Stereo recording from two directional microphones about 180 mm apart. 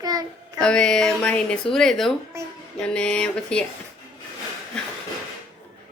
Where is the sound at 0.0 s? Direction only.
20° right (ahead or behind).